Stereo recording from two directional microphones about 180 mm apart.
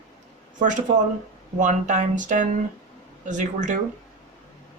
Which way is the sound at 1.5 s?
45° right (ahead or behind).